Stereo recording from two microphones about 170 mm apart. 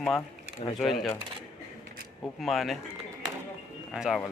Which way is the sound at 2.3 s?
Centre (ahead or behind).